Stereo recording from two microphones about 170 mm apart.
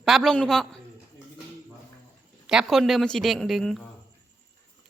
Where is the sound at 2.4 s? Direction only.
5° right (ahead or behind).